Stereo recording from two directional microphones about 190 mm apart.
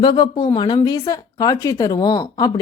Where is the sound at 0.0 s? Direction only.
25° left (ahead or behind).